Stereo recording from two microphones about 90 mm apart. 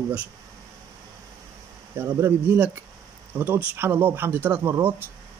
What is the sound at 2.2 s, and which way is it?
Speech, 30° right (ahead or behind).